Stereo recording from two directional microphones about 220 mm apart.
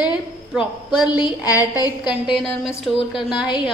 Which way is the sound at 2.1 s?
5° right (ahead or behind).